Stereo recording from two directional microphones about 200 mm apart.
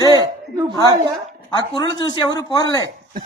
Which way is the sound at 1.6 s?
20° left (ahead or behind).